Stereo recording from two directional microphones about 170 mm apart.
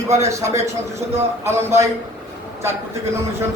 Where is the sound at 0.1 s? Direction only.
15° right (ahead or behind).